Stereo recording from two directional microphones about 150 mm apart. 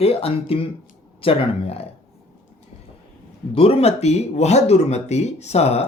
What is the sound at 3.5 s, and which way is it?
Speech, 40° left (ahead or behind).